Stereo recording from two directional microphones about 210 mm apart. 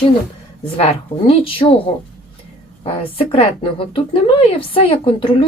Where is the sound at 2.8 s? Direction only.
25° left (ahead or behind).